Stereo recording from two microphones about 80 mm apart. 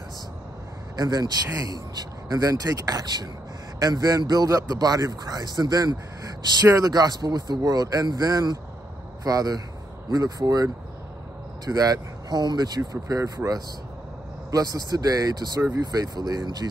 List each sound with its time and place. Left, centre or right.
0.9 s speech: right